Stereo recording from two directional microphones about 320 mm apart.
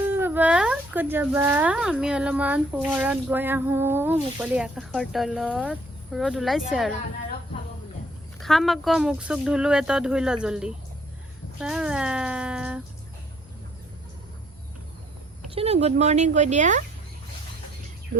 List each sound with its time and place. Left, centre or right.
0.1 s speech: centre
8.4 s speech: centre
15.4 s speech: centre